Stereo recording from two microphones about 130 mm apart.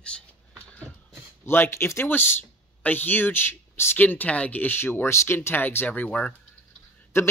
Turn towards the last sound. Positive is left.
turn(degrees=20)  # may be behind; listen again after turning